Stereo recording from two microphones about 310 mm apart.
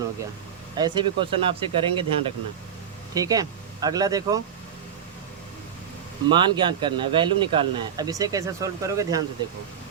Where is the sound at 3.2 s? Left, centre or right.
Centre.